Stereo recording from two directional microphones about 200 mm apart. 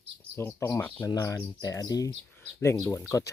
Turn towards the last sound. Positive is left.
turn(degrees=15)  # may be behind; listen again after turning